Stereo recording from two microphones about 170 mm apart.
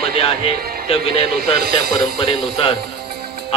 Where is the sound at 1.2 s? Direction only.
65° right (ahead or behind).